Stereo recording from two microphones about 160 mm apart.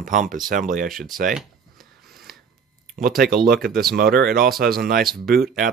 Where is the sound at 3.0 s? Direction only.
70° right (ahead or behind).